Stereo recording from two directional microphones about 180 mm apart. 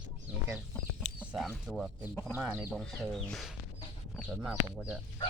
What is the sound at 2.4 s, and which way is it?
Speech, 10° right (ahead or behind).